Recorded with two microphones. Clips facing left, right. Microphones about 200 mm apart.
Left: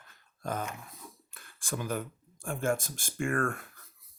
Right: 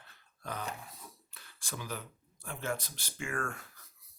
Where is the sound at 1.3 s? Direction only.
50° left (ahead or behind).